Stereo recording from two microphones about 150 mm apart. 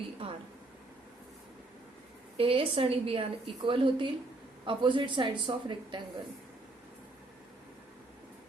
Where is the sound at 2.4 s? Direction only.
35° right (ahead or behind).